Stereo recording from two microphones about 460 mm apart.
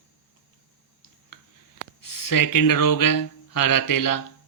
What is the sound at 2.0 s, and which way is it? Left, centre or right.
Speech, left.